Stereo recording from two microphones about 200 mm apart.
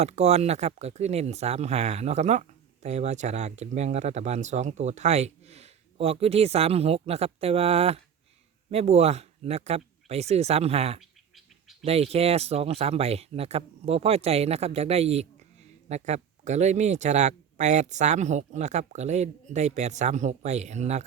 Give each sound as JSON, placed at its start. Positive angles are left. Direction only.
{"t": 0.0, "sound": "speech", "side_deg": -35}
{"t": 11.0, "sound": "bird", "side_deg": 0}
{"t": 11.9, "sound": "speech", "side_deg": -30}